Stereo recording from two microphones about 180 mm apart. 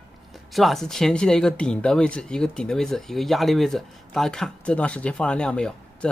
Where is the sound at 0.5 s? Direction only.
Centre (ahead or behind).